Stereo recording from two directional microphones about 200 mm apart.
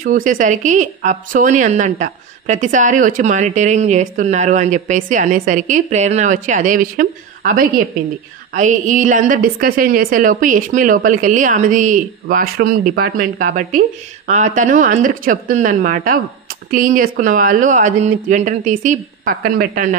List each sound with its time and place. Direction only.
0.0 s a woman's voice: 45° right (ahead or behind)